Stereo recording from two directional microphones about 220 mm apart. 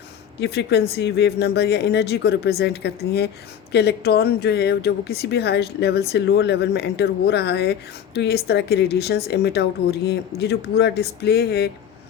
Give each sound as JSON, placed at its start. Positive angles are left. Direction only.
{"t": 0.3, "sound": "speech", "side_deg": 50}